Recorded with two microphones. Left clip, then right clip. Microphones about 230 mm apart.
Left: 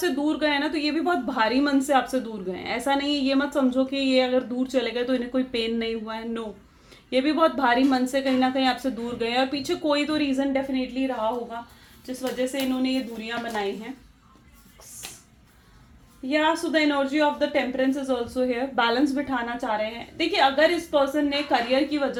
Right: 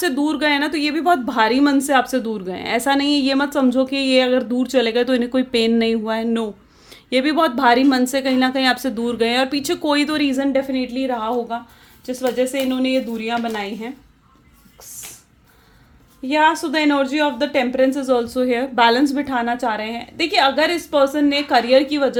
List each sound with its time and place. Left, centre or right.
0.0 s a woman's voice: right
12.8 s a woman's voice: right
16.3 s a woman's voice: right